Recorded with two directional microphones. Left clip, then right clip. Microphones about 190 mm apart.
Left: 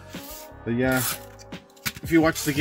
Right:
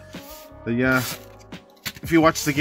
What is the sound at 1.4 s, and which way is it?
Music, centre (ahead or behind).